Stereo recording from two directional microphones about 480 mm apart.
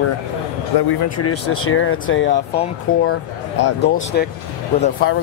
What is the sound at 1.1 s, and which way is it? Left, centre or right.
Speech, left.